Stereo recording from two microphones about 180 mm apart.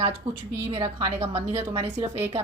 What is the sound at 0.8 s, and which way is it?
Speech, 20° right (ahead or behind).